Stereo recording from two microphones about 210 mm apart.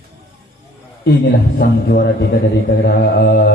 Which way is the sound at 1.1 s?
45° left (ahead or behind).